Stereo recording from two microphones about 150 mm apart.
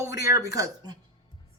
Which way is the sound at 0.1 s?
20° right (ahead or behind).